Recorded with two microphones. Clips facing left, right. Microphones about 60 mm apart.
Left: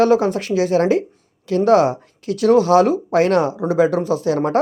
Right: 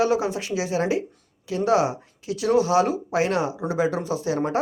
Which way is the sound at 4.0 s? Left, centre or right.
Left.